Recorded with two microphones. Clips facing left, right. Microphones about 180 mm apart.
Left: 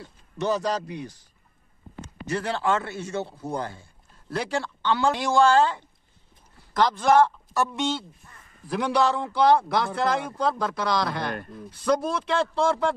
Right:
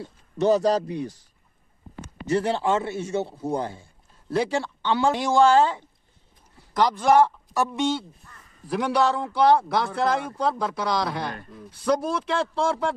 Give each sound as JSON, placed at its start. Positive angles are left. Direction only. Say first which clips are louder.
{"t": 0.0, "sound": "speech", "louder": "right 6 dB", "side_deg": -30}
{"t": 2.2, "sound": "a man's voice", "louder": "right 3 dB", "side_deg": -25}